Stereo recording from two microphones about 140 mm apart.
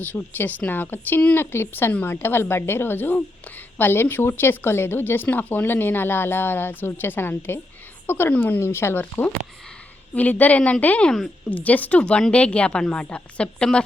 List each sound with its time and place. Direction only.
0.0 s speech: 10° left (ahead or behind)